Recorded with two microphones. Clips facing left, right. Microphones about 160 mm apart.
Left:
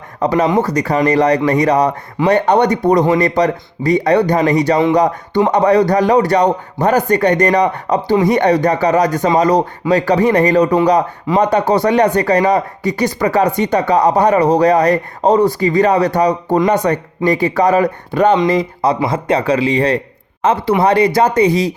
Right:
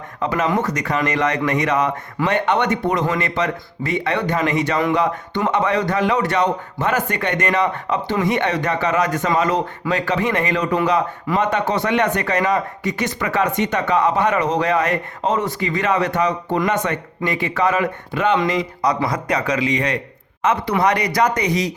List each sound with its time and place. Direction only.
0.2 s speech: 35° left (ahead or behind)